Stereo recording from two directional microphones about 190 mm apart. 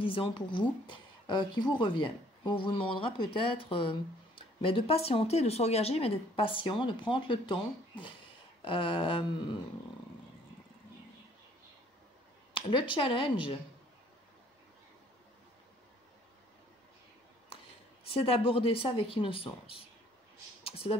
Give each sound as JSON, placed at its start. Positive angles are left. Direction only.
{"t": 0.0, "sound": "speech", "side_deg": 25}
{"t": 12.5, "sound": "speech", "side_deg": 25}
{"t": 18.0, "sound": "speech", "side_deg": 30}
{"t": 20.6, "sound": "a sound", "side_deg": 30}